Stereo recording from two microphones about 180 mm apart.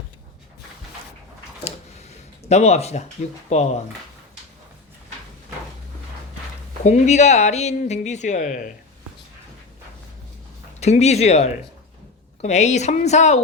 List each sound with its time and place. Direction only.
2.5 s speech: 40° left (ahead or behind)
6.8 s speech: 40° left (ahead or behind)
10.8 s speech: 40° left (ahead or behind)